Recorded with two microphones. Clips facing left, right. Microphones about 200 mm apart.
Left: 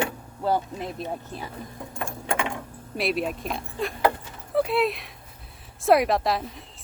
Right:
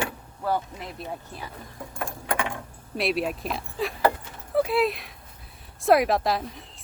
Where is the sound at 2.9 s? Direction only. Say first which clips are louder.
Even; centre (ahead or behind).